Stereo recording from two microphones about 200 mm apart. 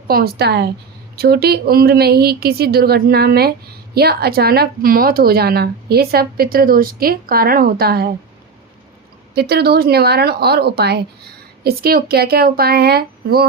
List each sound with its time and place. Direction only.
0.1 s speech: 50° right (ahead or behind)
9.3 s speech: 55° right (ahead or behind)